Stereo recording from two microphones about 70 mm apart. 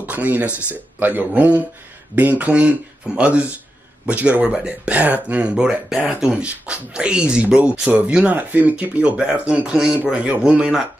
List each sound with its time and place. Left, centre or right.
0.0 s a man's voice: right